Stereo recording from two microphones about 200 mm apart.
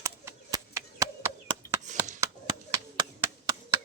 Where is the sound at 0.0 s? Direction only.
15° right (ahead or behind).